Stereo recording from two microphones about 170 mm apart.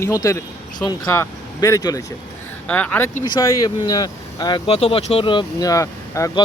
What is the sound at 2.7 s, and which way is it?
Speech, 10° left (ahead or behind).